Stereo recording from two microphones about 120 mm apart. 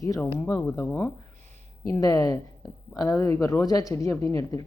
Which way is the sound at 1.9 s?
30° left (ahead or behind).